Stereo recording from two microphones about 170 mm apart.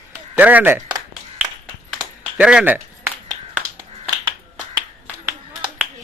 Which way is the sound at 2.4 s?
5° right (ahead or behind).